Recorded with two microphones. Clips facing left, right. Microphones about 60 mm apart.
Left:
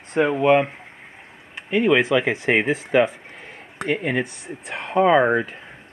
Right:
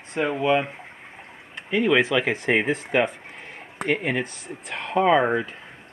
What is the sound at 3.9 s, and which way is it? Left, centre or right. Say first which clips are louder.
Speech: left 1 dB; left.